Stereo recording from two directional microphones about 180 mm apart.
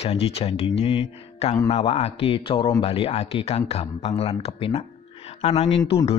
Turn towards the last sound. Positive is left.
turn(degrees=30)  # may be behind; listen again after turning